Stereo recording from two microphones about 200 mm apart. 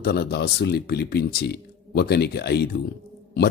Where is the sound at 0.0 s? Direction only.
55° left (ahead or behind).